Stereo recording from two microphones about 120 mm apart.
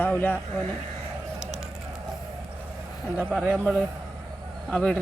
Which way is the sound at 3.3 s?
5° right (ahead or behind).